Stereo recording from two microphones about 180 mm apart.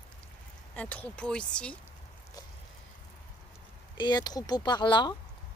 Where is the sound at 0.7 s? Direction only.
10° left (ahead or behind).